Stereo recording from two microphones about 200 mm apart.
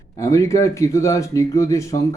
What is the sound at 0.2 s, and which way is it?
A man's voice, 15° left (ahead or behind).